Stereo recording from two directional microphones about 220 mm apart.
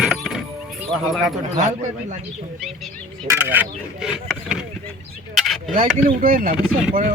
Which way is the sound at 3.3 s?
10° right (ahead or behind).